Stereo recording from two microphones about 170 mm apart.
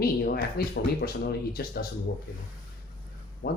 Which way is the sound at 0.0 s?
65° left (ahead or behind).